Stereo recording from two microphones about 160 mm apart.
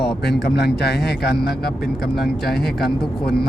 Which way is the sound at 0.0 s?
80° left.